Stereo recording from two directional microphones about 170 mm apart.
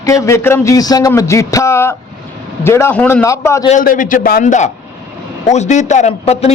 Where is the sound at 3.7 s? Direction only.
50° left (ahead or behind).